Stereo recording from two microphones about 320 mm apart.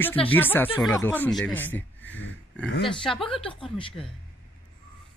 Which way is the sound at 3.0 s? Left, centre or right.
Centre.